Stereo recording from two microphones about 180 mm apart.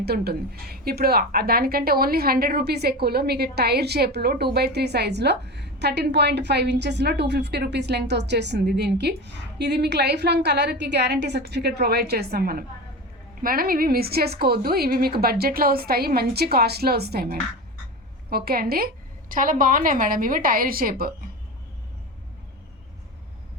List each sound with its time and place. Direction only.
0.0 s a woman's voice: 60° right (ahead or behind)